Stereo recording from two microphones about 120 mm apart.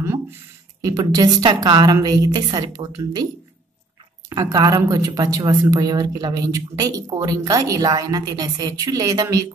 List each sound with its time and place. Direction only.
0.8 s a woman's voice: 30° right (ahead or behind)
4.3 s a woman's voice: 30° right (ahead or behind)